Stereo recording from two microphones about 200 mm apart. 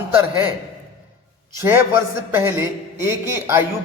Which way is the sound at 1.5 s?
15° right (ahead or behind).